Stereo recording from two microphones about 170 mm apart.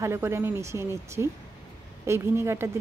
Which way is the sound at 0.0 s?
15° right (ahead or behind).